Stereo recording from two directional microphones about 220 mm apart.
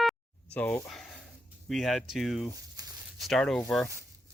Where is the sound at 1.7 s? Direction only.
Centre (ahead or behind).